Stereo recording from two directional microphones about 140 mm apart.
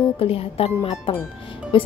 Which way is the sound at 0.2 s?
45° left (ahead or behind).